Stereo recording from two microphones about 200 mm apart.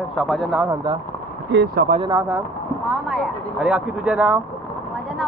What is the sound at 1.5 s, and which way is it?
Speech, 60° right (ahead or behind).